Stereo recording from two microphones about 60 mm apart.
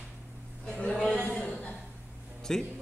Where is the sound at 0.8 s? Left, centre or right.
Centre.